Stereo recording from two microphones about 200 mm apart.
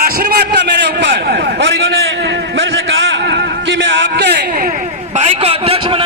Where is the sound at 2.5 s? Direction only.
70° right (ahead or behind); by 4.6 s 55° right (ahead or behind).